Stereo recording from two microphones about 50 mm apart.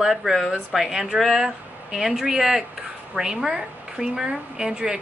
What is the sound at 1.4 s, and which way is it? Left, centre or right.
A woman's voice, centre.